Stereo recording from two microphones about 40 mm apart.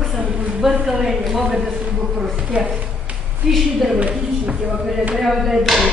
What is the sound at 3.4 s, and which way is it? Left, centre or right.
Speech, centre.